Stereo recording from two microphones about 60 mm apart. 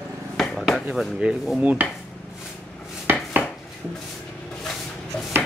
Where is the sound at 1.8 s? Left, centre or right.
Right.